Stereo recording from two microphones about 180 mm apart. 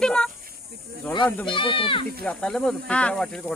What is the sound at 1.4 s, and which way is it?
Speech, 30° left (ahead or behind).